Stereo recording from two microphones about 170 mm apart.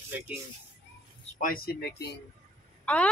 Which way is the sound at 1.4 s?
60° left (ahead or behind).